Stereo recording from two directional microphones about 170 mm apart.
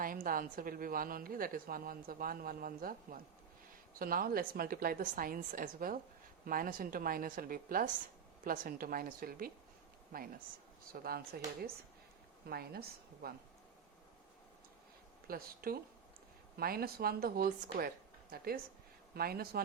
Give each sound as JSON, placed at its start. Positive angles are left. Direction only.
{"t": 0.0, "sound": "a woman's voice", "side_deg": -55}
{"t": 10.9, "sound": "a woman's voice", "side_deg": -60}
{"t": 15.3, "sound": "a woman's voice", "side_deg": -60}